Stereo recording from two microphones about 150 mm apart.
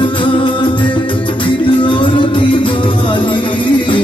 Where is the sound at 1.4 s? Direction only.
35° left (ahead or behind).